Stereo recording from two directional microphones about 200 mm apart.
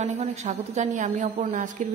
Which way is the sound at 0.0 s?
35° right (ahead or behind).